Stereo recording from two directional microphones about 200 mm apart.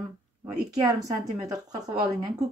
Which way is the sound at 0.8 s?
15° right (ahead or behind).